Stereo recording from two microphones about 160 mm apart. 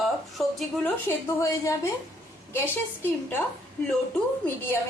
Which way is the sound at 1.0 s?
20° left (ahead or behind).